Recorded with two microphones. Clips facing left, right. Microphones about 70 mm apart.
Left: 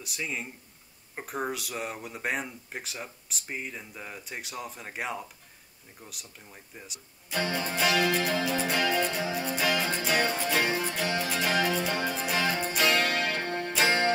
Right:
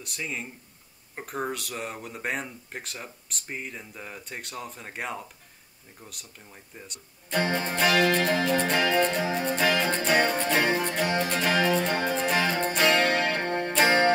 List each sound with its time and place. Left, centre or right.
0.0 s speech: centre
7.3 s music: right